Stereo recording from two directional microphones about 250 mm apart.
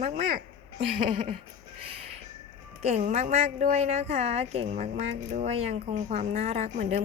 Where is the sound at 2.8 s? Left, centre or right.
Right.